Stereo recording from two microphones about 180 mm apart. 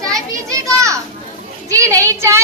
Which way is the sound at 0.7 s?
15° right (ahead or behind).